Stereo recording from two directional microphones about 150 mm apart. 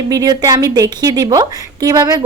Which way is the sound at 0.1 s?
25° right (ahead or behind).